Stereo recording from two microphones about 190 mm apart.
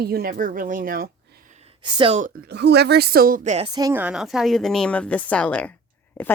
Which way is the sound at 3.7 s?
20° right (ahead or behind).